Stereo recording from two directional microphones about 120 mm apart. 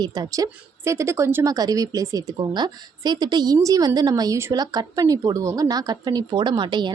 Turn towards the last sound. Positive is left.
turn(degrees=-40)  # may be behind; listen again after turning